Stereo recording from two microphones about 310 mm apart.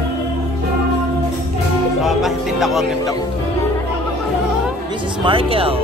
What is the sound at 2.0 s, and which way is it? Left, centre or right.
Music, centre.